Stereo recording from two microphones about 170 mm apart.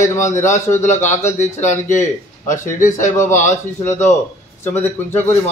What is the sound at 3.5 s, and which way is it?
A man's voice, 15° left (ahead or behind).